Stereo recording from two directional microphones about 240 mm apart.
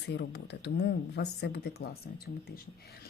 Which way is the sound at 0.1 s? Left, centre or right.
Left.